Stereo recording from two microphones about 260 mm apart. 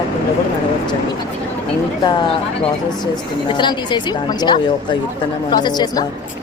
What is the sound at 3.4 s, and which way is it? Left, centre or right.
Speech, centre.